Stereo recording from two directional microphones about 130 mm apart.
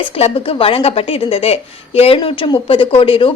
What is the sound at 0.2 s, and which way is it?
Speech, 50° left (ahead or behind).